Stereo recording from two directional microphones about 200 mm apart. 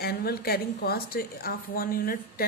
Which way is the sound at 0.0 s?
50° left (ahead or behind).